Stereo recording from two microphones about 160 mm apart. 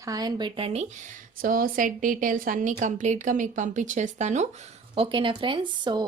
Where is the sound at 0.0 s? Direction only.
25° right (ahead or behind); by 0.9 s 40° right (ahead or behind).